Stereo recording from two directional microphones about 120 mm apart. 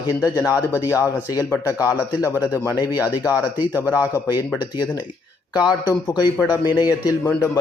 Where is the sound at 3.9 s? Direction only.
15° right (ahead or behind).